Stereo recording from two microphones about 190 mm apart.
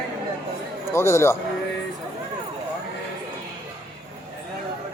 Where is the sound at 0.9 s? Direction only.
15° left (ahead or behind).